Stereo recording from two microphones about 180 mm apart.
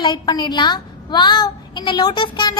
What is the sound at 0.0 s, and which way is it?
A woman's voice, 25° left (ahead or behind).